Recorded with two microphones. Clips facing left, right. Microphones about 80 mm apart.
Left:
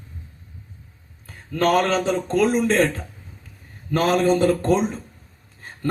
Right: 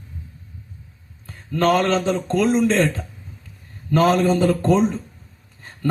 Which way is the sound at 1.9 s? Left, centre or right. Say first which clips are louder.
Right 1 dB; centre.